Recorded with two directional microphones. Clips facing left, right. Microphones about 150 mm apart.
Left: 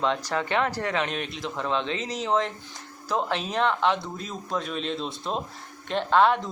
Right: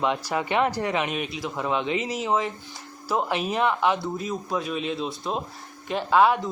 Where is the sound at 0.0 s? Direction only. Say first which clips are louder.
Right 1 dB; 10° right (ahead or behind).